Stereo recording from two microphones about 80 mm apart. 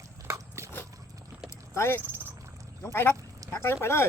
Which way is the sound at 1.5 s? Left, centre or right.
Left.